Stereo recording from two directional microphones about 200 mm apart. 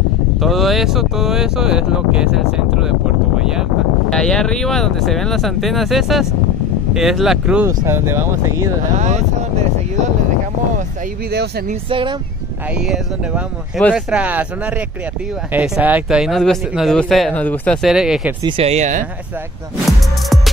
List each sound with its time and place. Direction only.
0.4 s speech: centre (ahead or behind)
8.9 s speech: 35° right (ahead or behind)
11.9 s speech: 25° right (ahead or behind)
12.7 s speech: 5° right (ahead or behind)
15.5 s speech: 5° right (ahead or behind)
18.4 s speech: 30° right (ahead or behind)